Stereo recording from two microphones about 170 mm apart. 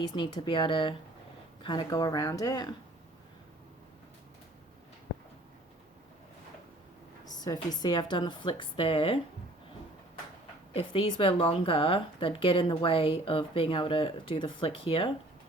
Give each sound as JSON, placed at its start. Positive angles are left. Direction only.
{"t": 0.1, "sound": "a woman's voice", "side_deg": 30}
{"t": 7.3, "sound": "a sound", "side_deg": 25}
{"t": 7.8, "sound": "a woman's voice", "side_deg": 25}
{"t": 10.8, "sound": "speech", "side_deg": 35}